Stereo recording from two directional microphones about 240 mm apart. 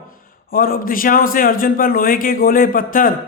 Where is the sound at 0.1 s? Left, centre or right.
Left.